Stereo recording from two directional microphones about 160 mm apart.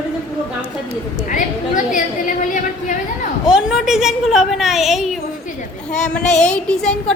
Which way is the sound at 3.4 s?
5° right (ahead or behind).